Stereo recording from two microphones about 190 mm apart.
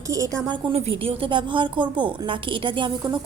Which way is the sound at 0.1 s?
15° right (ahead or behind).